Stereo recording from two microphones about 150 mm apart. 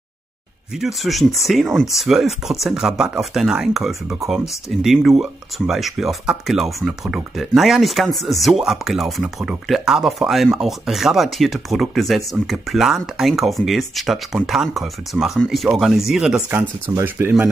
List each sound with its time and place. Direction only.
0.7 s speech: centre (ahead or behind)